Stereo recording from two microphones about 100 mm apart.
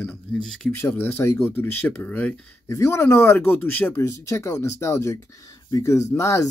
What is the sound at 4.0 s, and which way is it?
Speech, 30° left (ahead or behind).